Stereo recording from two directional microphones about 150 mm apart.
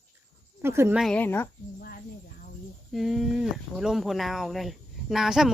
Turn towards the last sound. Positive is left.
turn(degrees=-5)  # may be behind; listen again after turning